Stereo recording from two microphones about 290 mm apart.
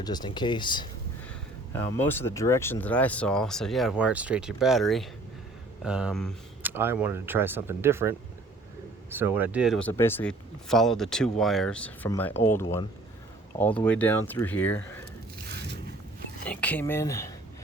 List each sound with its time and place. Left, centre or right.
0.0 s speech: centre
16.5 s speech: centre